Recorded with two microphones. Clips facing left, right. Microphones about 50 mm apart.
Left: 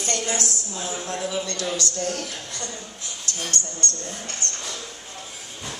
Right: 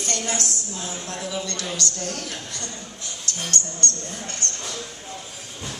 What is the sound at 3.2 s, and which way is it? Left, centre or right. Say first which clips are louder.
Speech: right 1 dB; right.